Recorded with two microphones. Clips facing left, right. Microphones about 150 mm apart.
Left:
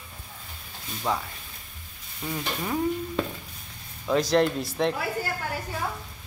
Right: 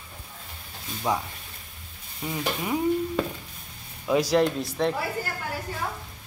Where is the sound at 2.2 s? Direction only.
10° right (ahead or behind).